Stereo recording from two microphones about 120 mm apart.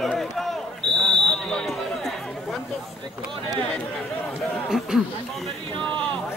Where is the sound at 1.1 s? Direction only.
5° left (ahead or behind).